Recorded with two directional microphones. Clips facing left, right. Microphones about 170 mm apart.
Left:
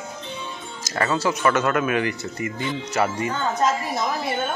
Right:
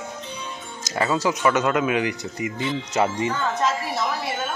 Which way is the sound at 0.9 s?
15° right (ahead or behind).